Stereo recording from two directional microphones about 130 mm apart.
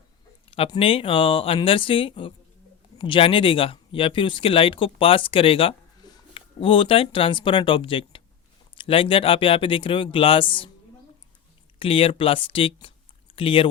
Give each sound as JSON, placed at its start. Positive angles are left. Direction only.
{"t": 0.8, "sound": "speech", "side_deg": 45}
{"t": 11.8, "sound": "speech", "side_deg": 45}